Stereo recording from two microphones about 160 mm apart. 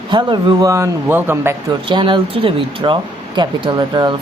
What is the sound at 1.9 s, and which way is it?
Speech, 30° right (ahead or behind).